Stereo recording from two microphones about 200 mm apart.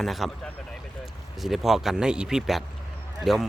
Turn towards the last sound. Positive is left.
turn(degrees=0)  # may be behind; listen again after turning